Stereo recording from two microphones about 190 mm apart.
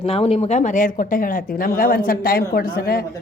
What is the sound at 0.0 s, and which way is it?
Speech, 30° left (ahead or behind).